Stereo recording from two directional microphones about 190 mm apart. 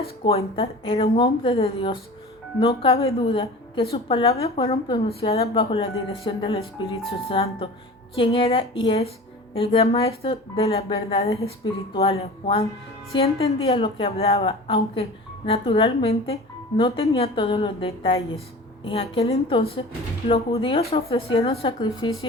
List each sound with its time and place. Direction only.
0.3 s a woman's voice: 30° left (ahead or behind)